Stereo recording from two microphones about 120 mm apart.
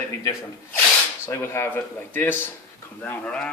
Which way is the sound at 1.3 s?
20° left (ahead or behind).